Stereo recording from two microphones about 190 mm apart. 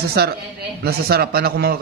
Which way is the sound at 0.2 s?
55° right (ahead or behind).